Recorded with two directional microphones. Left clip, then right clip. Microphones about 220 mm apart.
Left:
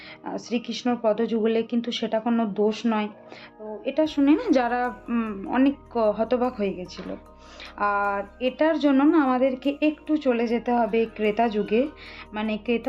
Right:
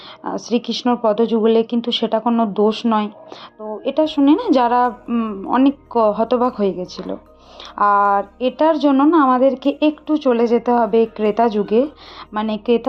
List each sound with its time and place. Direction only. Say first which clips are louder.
0.3 s a woman's voice: right 9 dB; 20° right (ahead or behind)